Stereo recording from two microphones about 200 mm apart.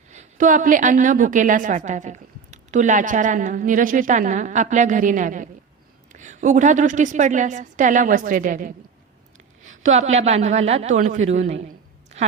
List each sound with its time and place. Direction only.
0.1 s a woman's voice: 40° right (ahead or behind)